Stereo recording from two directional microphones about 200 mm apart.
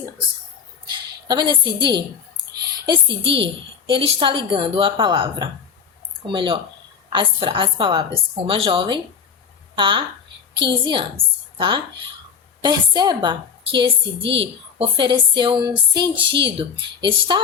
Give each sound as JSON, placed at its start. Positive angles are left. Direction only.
{"t": 0.9, "sound": "a woman's voice", "side_deg": -20}